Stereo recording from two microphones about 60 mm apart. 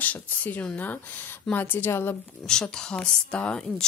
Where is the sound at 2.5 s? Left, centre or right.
Centre.